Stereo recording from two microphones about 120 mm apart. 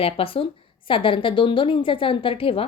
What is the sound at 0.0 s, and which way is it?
A woman's voice, 50° left (ahead or behind).